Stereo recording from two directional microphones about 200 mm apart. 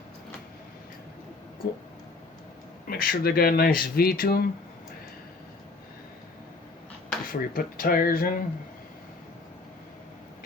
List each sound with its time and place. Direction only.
2.8 s speech: 45° left (ahead or behind)
7.3 s speech: 45° left (ahead or behind)